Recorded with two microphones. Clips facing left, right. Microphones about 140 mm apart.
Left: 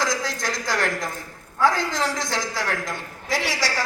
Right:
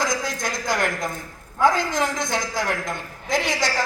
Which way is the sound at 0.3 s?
20° right (ahead or behind).